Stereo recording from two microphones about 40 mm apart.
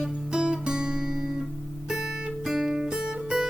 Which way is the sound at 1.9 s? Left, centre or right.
Centre.